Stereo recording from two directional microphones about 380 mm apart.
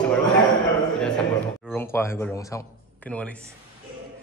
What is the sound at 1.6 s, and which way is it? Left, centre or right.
Speech, centre.